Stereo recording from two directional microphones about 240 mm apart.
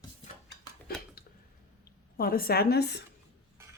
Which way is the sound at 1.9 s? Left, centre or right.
Left.